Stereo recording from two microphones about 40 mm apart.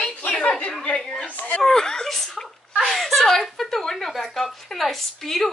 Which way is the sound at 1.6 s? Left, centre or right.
Centre.